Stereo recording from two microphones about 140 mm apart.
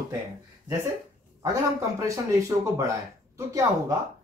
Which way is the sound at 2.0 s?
25° right (ahead or behind).